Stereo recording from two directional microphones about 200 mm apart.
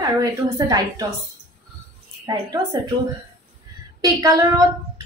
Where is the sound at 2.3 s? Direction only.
20° right (ahead or behind).